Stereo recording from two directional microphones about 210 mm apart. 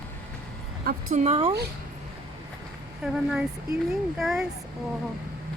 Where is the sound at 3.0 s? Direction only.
5° right (ahead or behind).